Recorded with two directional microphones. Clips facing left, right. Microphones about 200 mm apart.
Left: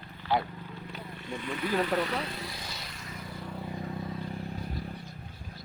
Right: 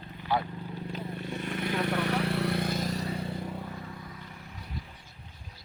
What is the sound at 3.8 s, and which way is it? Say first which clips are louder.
Vehicle: left 7 dB; 30° left (ahead or behind).